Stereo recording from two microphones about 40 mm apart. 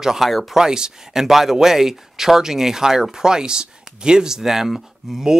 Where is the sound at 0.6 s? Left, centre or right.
Centre.